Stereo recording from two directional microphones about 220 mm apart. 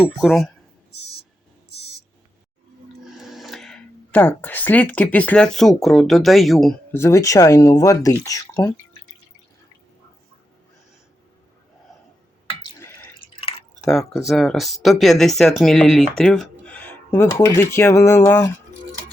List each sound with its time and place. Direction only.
0.2 s speech: centre (ahead or behind)
0.9 s a sound: 45° left (ahead or behind)
3.2 s speech: centre (ahead or behind)
6.9 s speech: 10° left (ahead or behind)
13.8 s speech: centre (ahead or behind)